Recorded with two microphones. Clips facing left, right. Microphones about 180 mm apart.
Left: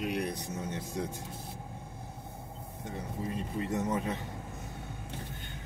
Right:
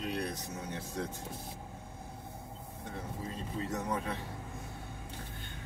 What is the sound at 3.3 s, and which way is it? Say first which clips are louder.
Speech: left 4 dB; 20° left (ahead or behind).